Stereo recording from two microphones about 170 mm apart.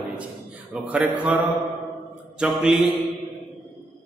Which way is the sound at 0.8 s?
5° right (ahead or behind).